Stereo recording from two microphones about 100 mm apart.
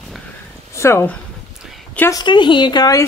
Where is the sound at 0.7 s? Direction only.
25° left (ahead or behind).